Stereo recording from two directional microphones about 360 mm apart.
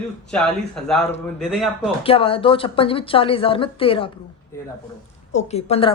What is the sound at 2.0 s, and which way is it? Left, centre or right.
A woman's voice, centre.